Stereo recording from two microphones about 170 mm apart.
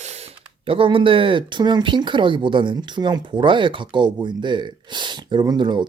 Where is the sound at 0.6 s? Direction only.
30° right (ahead or behind).